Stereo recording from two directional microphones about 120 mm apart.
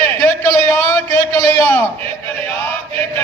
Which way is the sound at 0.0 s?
15° left (ahead or behind).